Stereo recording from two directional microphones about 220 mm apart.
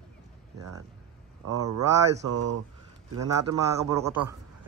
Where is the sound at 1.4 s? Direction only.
90° right.